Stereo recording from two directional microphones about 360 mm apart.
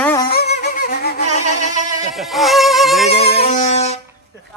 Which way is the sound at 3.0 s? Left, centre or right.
Centre.